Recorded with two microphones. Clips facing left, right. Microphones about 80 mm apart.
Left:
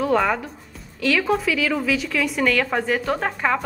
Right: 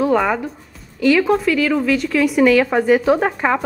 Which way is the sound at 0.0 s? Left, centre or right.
Centre.